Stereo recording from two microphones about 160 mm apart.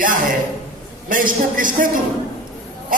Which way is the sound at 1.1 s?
60° right (ahead or behind).